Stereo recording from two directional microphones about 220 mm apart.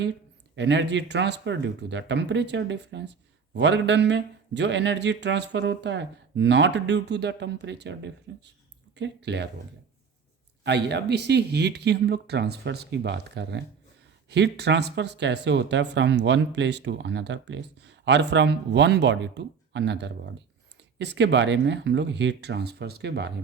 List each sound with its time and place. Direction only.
0.5 s speech: 50° right (ahead or behind)
10.6 s speech: 50° right (ahead or behind)